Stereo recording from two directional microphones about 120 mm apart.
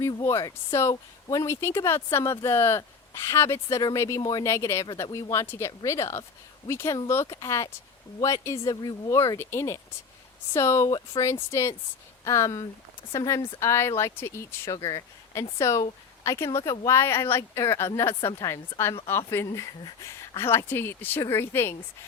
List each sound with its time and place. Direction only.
0.1 s speech: 25° left (ahead or behind)